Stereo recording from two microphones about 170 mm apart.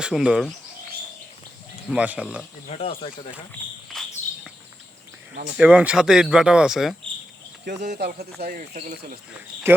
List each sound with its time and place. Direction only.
0.0 s speech: 5° right (ahead or behind)
1.9 s speech: 5° right (ahead or behind)
2.6 s speech: 35° left (ahead or behind)
5.5 s speech: 5° right (ahead or behind)
7.9 s speech: 70° right (ahead or behind)
8.7 s speech: 50° right (ahead or behind)
9.7 s speech: 15° right (ahead or behind)